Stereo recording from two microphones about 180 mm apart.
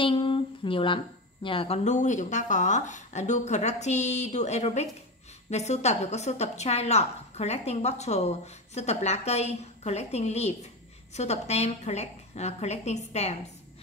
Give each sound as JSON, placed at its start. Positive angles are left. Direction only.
{"t": 0.0, "sound": "a woman's voice", "side_deg": 30}